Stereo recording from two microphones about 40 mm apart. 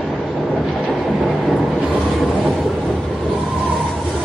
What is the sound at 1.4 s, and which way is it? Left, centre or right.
Vehicle, centre.